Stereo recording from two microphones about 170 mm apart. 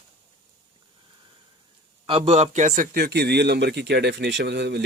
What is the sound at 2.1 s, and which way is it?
A man's voice, 35° right (ahead or behind).